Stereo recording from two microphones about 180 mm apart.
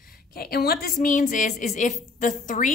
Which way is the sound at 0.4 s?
60° left (ahead or behind).